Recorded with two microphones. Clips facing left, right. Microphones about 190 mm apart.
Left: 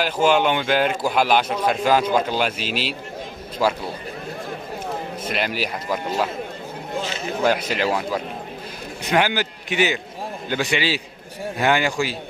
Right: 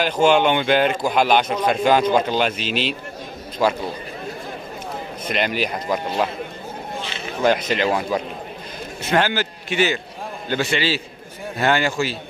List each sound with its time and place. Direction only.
0.0 s a man's voice: 5° left (ahead or behind)
5.3 s a man's voice: 5° left (ahead or behind)
7.0 s a sound: 40° left (ahead or behind)
7.4 s speech: 10° left (ahead or behind)
9.0 s speech: 15° left (ahead or behind)